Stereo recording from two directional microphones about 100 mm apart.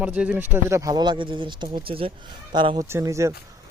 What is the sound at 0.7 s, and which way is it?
A man's voice, 40° right (ahead or behind).